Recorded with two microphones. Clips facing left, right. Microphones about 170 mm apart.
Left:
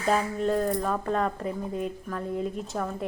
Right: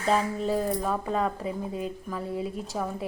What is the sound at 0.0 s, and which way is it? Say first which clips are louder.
Speech: even; centre (ahead or behind).